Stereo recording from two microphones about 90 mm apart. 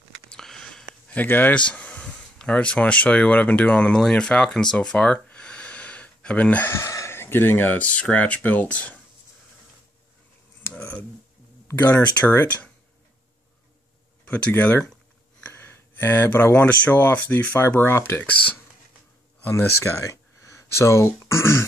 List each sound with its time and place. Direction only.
0.3 s a sound: 5° left (ahead or behind)
1.1 s speech: 20° left (ahead or behind)
6.7 s speech: 35° left (ahead or behind); by 8.9 s 15° left (ahead or behind)
10.8 s a sound: 20° left (ahead or behind)
11.8 s speech: 20° left (ahead or behind)
14.2 s speech: 15° left (ahead or behind)
19.5 s speech: 35° left (ahead or behind)